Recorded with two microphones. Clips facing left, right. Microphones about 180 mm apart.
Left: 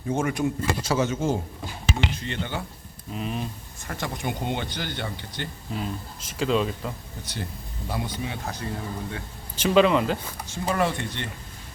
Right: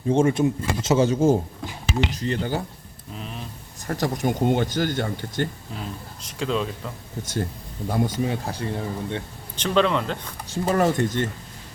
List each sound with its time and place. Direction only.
0.1 s speech: 30° right (ahead or behind)
3.1 s speech: 5° left (ahead or behind)
3.8 s speech: 40° right (ahead or behind)
5.7 s speech: centre (ahead or behind)
7.9 s speech: 50° right (ahead or behind); by 9.2 s 25° right (ahead or behind)
9.6 s speech: 5° left (ahead or behind)
10.4 s speech: 40° right (ahead or behind)